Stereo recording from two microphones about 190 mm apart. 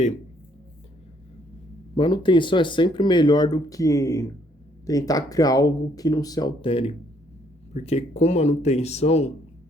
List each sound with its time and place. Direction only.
2.0 s speech: 25° left (ahead or behind)